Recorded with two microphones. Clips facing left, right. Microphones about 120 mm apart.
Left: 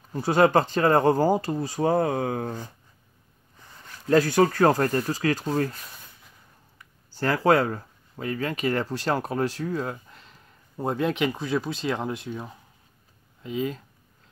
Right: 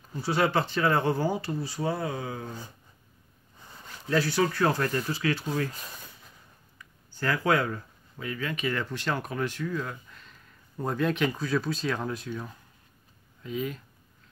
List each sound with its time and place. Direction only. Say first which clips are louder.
0.1 s speech: left 6 dB; 45° left (ahead or behind)
4.1 s speech: left 6 dB; 45° left (ahead or behind)
7.2 s speech: left 5 dB; 35° left (ahead or behind)